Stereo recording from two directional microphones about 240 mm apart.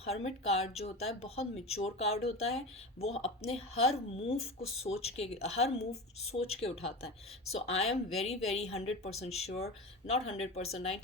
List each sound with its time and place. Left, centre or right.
0.0 s speech: left